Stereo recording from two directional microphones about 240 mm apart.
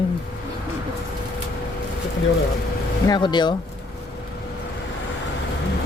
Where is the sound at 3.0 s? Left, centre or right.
Centre.